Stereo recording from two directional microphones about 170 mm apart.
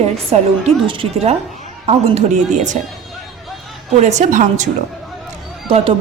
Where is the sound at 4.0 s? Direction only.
40° right (ahead or behind).